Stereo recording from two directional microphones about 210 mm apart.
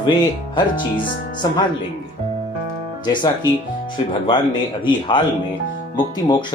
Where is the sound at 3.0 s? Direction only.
20° left (ahead or behind).